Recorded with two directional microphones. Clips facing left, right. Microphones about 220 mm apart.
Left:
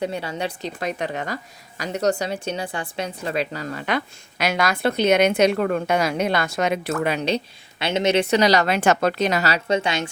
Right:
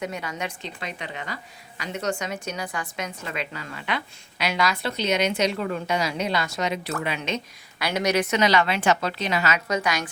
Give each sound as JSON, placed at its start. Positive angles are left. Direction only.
{"t": 0.0, "sound": "a woman's voice", "side_deg": 30}
{"t": 7.0, "sound": "speech", "side_deg": 40}